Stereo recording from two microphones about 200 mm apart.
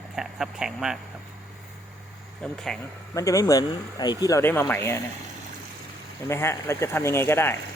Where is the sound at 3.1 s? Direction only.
15° left (ahead or behind).